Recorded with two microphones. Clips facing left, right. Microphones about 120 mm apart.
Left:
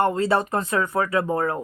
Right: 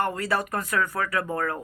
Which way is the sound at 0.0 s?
25° left (ahead or behind).